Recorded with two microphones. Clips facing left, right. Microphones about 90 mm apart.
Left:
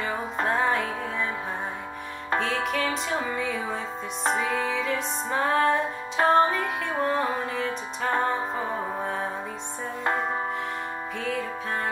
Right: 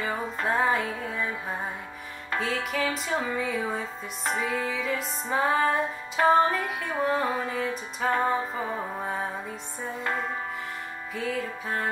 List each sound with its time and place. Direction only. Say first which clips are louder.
0.0 s music: left 1 dB; 5° left (ahead or behind)
2.4 s music: right 1 dB; centre (ahead or behind)
10.0 s music: left 5 dB; 35° left (ahead or behind)
11.1 s music: right 1 dB; centre (ahead or behind)